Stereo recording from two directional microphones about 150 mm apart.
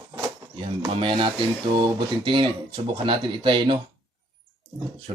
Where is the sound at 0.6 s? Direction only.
35° right (ahead or behind).